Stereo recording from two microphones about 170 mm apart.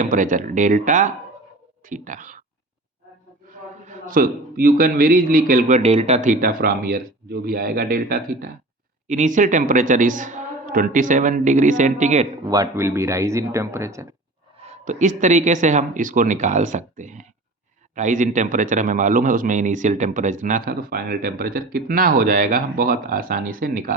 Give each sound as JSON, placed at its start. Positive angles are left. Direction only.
{"t": 0.0, "sound": "a man's voice", "side_deg": -50}
{"t": 3.8, "sound": "a man's voice", "side_deg": -55}
{"t": 9.0, "sound": "a man's voice", "side_deg": -45}
{"t": 12.5, "sound": "speech", "side_deg": -15}
{"t": 14.6, "sound": "a man's voice", "side_deg": -45}